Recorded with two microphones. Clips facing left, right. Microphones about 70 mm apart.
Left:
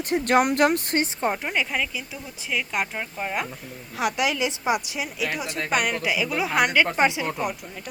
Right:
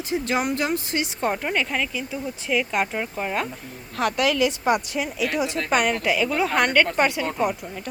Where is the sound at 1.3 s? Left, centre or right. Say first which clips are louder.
Right 2 dB; centre.